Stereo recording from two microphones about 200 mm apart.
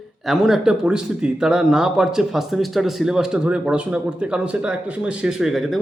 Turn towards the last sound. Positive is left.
turn(degrees=0)  # may be behind; listen again after turning